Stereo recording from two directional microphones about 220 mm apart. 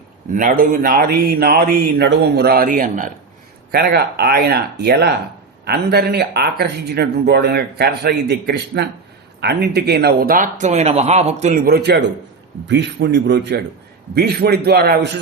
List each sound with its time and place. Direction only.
0.3 s speech: 40° right (ahead or behind)